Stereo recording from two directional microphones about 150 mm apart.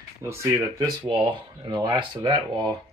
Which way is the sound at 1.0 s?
35° right (ahead or behind).